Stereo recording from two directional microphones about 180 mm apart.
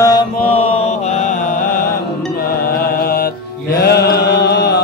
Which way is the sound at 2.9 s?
55° left (ahead or behind).